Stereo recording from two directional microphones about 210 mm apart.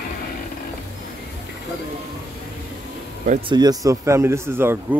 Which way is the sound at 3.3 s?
25° right (ahead or behind).